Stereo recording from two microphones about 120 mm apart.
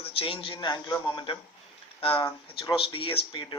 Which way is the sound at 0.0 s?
50° left (ahead or behind).